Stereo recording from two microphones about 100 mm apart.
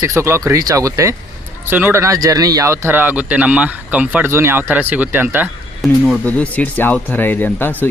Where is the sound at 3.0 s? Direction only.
15° right (ahead or behind).